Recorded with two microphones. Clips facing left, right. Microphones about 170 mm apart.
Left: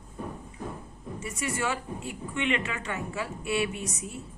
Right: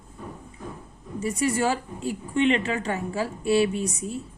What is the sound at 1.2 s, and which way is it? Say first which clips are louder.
A woman's voice: right 8 dB; 35° right (ahead or behind).